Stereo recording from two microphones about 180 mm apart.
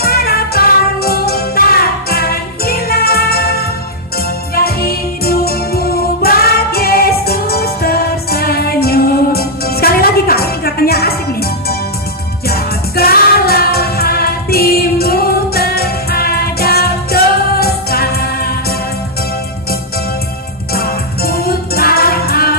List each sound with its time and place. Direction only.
0.0 s music: 60° left (ahead or behind)
4.5 s music: 55° left (ahead or behind)
20.7 s music: 55° left (ahead or behind)